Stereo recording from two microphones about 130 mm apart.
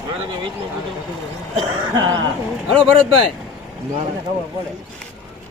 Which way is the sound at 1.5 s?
30° right (ahead or behind).